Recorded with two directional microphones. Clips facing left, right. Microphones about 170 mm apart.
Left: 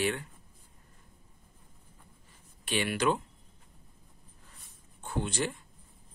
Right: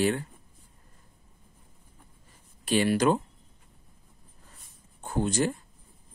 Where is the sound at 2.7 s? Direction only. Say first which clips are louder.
Right 6 dB; 40° right (ahead or behind).